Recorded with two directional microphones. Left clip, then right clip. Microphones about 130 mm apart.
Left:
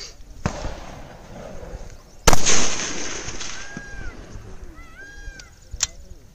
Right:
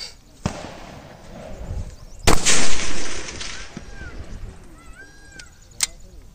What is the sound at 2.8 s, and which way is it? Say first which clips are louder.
Gunshot: even; 5° left (ahead or behind).